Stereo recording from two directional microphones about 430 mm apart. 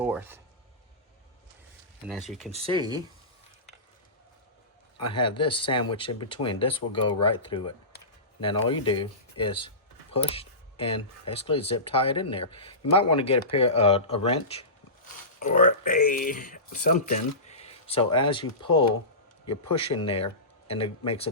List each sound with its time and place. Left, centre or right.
0.0 s speech: centre
2.5 s speech: centre
5.0 s speech: centre
7.9 s a sound: centre
8.6 s speech: centre